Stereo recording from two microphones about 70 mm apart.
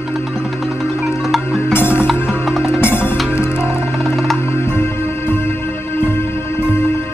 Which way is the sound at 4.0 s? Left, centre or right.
Centre.